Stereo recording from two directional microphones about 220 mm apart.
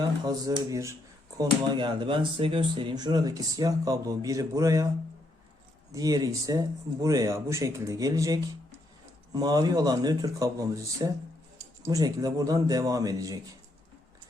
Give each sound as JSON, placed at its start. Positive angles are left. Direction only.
{"t": 0.3, "sound": "speech", "side_deg": -20}
{"t": 5.9, "sound": "speech", "side_deg": -15}